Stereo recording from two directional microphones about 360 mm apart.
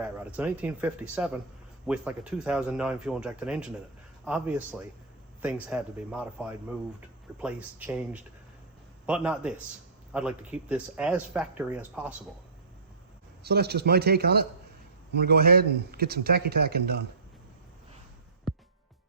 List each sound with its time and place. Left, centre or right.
0.0 s speech: centre
13.4 s speech: right